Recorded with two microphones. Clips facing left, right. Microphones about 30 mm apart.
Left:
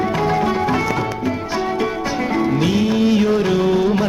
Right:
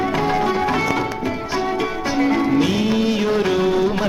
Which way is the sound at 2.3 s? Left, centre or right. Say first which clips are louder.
Left 3 dB; centre.